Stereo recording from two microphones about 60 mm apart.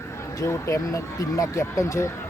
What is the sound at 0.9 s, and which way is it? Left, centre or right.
Speech, left.